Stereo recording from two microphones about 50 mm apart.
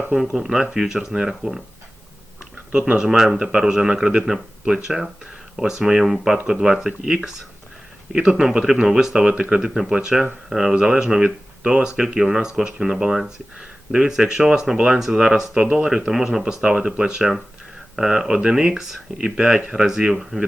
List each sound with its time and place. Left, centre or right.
0.3 s speech: centre
2.7 s speech: centre
9.1 s speech: right
9.6 s speech: centre